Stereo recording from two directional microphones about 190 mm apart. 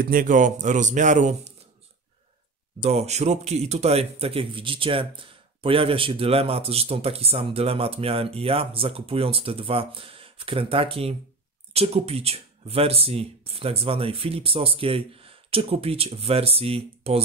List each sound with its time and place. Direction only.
0.0 s a man's voice: 45° right (ahead or behind)
2.8 s a man's voice: 35° right (ahead or behind)